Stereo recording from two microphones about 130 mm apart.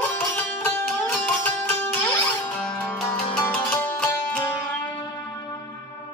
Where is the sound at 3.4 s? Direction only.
10° left (ahead or behind).